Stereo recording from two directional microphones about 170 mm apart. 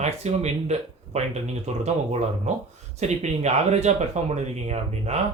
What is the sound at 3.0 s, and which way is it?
Speech, 40° right (ahead or behind).